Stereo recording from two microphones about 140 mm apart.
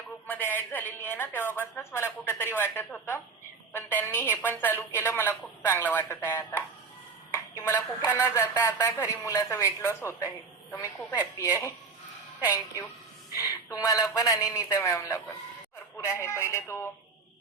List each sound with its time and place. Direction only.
0.3 s speech: 15° left (ahead or behind)
7.3 s a sound: 20° left (ahead or behind)
8.0 s speech: 15° left (ahead or behind)
12.5 s speech: 20° left (ahead or behind)